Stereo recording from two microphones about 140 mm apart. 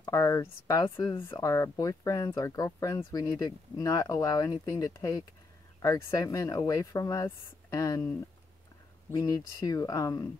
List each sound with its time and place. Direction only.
0.0 s speech: 25° left (ahead or behind)
0.8 s speech: 35° left (ahead or behind)
1.3 s speech: 25° left (ahead or behind)
9.1 s speech: 25° left (ahead or behind)